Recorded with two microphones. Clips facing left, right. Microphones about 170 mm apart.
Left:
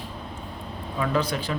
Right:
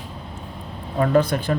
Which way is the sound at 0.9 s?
50° right (ahead or behind).